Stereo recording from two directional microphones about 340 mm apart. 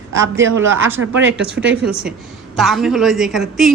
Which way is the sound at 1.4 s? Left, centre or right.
Centre.